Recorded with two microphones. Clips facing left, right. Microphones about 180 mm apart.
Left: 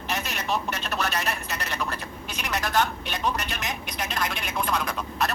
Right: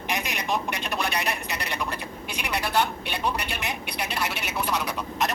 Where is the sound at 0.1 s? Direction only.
15° right (ahead or behind).